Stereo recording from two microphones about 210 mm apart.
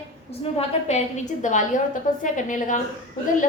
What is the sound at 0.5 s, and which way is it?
A woman's voice, 30° left (ahead or behind).